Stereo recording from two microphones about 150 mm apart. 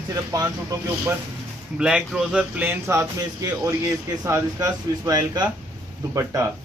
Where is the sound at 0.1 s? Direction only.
20° right (ahead or behind).